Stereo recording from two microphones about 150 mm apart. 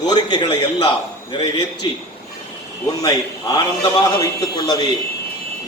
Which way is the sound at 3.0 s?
25° left (ahead or behind).